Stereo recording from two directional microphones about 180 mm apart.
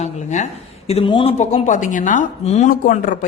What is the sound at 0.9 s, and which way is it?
A woman's voice, 30° left (ahead or behind).